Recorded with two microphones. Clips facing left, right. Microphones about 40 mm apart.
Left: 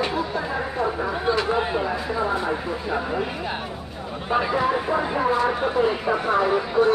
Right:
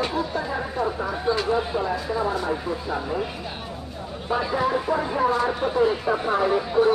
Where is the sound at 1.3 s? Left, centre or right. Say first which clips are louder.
Left 1 dB; left.